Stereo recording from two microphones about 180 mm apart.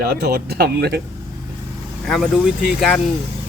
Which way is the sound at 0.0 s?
65° right (ahead or behind).